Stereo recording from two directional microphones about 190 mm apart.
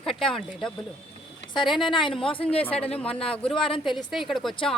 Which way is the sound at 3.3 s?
5° left (ahead or behind).